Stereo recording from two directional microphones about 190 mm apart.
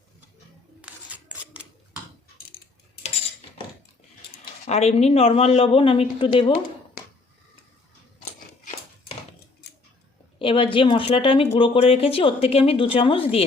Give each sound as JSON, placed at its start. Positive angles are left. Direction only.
{"t": 0.8, "sound": "scissors", "side_deg": -5}
{"t": 4.6, "sound": "speech", "side_deg": 35}
{"t": 9.6, "sound": "tick-tock", "side_deg": 60}
{"t": 10.3, "sound": "speech", "side_deg": 25}